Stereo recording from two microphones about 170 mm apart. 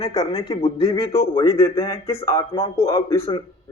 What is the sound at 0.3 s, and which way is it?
Speech, 35° left (ahead or behind).